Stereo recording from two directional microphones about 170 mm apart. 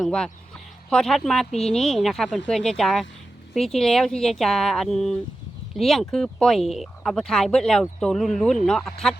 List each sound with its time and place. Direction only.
0.0 s speech: 5° left (ahead or behind)
1.5 s speech: 40° left (ahead or behind)
1.7 s speech: centre (ahead or behind)